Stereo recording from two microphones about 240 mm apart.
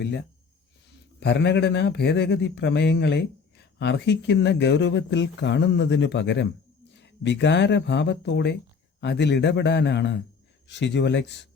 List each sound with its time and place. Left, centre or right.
1.2 s speech: left